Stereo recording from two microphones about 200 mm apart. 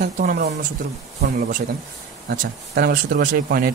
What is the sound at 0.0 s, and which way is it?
Speech, 45° right (ahead or behind).